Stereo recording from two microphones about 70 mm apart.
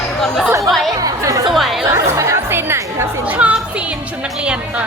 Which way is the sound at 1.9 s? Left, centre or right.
Right.